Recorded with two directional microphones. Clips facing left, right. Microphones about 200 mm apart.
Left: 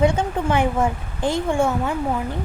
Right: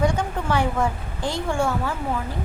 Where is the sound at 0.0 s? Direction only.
20° left (ahead or behind).